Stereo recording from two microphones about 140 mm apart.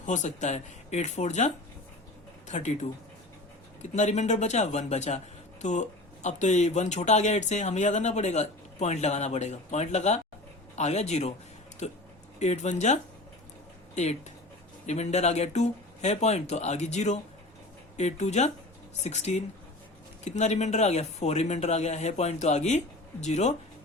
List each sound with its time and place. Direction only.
0.0 s speech: 60° left (ahead or behind)
3.9 s speech: 55° left (ahead or behind)